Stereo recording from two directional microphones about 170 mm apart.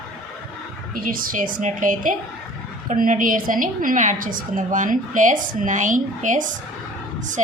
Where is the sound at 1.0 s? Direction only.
55° right (ahead or behind).